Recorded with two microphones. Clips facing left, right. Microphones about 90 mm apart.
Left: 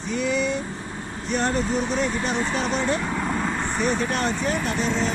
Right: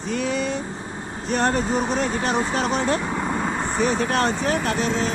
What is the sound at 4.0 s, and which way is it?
Speech, 45° right (ahead or behind).